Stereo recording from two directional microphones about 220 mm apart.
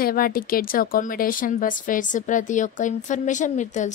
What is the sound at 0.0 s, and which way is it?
A woman's voice, 40° left (ahead or behind).